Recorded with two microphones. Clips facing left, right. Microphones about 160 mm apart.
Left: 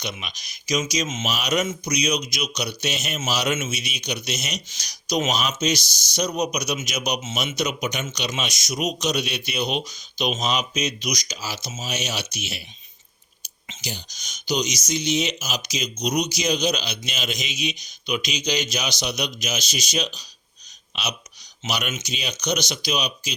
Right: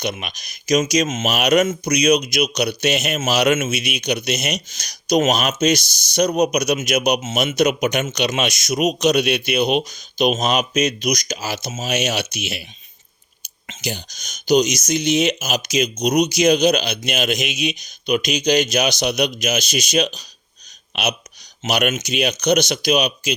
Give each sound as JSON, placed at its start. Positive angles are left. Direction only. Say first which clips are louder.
{"t": 0.0, "sound": "speech", "louder": "right 7 dB", "side_deg": -55}